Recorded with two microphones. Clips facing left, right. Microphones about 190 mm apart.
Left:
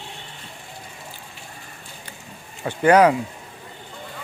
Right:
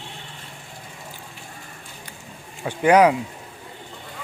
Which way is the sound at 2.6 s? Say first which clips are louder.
Left 1 dB; 10° right (ahead or behind).